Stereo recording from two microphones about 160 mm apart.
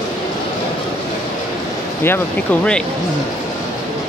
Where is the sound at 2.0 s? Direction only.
10° left (ahead or behind).